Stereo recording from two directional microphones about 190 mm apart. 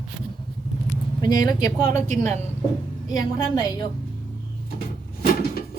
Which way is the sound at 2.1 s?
35° right (ahead or behind).